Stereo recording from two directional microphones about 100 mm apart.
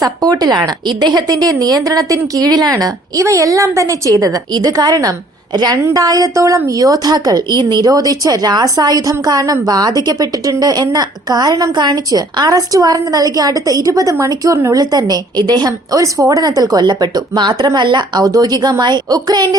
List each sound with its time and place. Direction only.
0.0 s speech: 40° right (ahead or behind)
16.8 s speech: 45° right (ahead or behind)
18.3 s speech: 35° right (ahead or behind)